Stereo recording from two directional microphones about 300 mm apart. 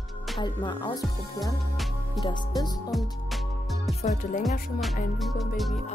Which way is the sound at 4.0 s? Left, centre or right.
Left.